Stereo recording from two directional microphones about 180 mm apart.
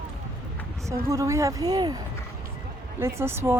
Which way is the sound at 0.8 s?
15° right (ahead or behind).